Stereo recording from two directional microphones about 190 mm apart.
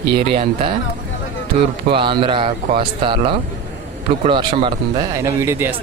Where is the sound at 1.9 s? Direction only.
25° right (ahead or behind).